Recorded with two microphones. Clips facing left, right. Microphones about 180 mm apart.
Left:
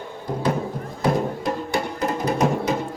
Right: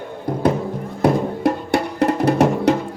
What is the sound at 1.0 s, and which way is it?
Music, 65° right (ahead or behind).